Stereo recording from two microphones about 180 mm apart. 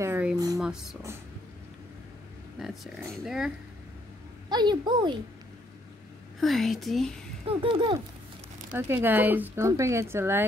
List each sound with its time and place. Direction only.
0.0 s a sound: 10° right (ahead or behind)
0.6 s speech: centre (ahead or behind)
2.6 s speech: centre (ahead or behind)
4.5 s a woman's voice: 25° right (ahead or behind)
6.4 s speech: centre (ahead or behind)
7.4 s a woman's voice: 30° right (ahead or behind)
8.7 s speech: 10° right (ahead or behind)